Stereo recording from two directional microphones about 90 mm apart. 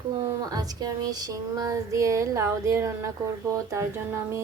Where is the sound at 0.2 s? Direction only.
40° right (ahead or behind).